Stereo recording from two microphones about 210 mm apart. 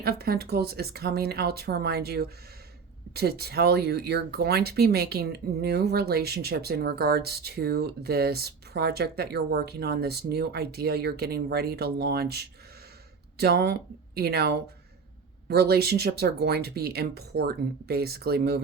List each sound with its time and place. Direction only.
0.0 s speech: 50° right (ahead or behind)